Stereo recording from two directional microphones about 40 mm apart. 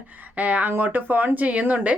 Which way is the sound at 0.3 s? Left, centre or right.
Right.